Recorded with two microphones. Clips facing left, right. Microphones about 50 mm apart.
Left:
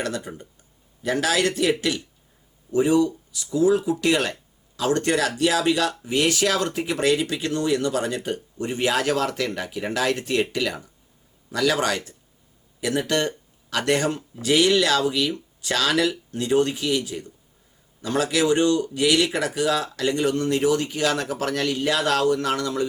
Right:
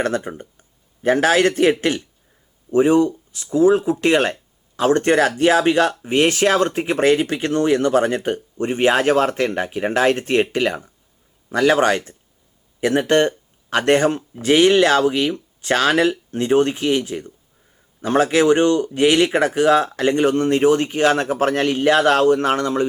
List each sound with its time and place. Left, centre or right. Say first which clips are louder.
0.0 s speech: right 7 dB; right